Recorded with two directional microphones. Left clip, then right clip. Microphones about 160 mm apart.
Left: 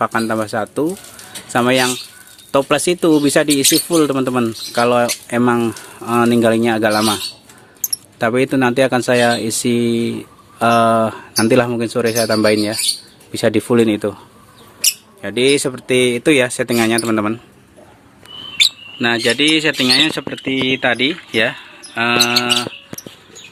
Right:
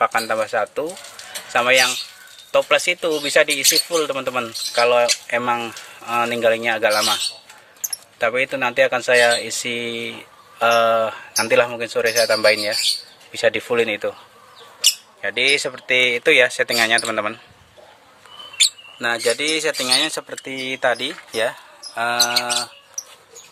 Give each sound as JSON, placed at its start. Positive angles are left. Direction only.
{"t": 0.0, "sound": "speech", "side_deg": 15}
{"t": 8.2, "sound": "speech", "side_deg": 30}
{"t": 12.5, "sound": "speech", "side_deg": 25}
{"t": 15.2, "sound": "speech", "side_deg": 15}
{"t": 18.9, "sound": "speech", "side_deg": -5}
{"t": 20.3, "sound": "speech", "side_deg": -15}